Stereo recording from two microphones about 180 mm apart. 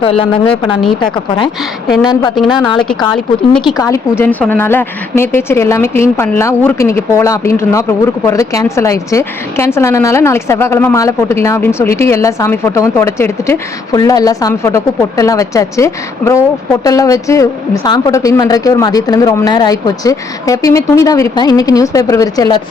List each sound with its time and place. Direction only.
0.0 s a woman's voice: 30° left (ahead or behind)
2.5 s a woman's voice: 25° left (ahead or behind)